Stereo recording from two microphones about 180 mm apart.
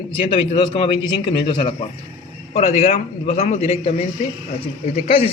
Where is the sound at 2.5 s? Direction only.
40° left (ahead or behind).